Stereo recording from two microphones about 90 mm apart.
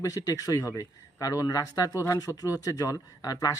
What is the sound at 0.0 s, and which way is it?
Speech, 40° left (ahead or behind).